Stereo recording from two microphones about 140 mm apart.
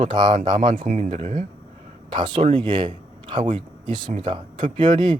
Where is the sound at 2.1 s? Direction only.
35° right (ahead or behind).